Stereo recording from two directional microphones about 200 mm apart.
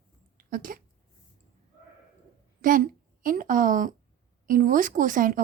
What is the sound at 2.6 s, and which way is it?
A woman's voice, 45° right (ahead or behind).